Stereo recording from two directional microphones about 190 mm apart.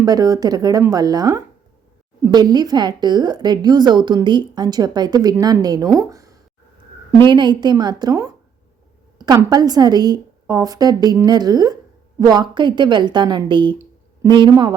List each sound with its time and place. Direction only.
0.0 s a woman's voice: 20° right (ahead or behind)